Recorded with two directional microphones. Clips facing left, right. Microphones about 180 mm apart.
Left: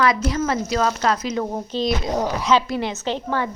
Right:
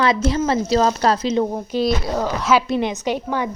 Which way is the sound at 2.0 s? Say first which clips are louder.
Even; 20° left (ahead or behind).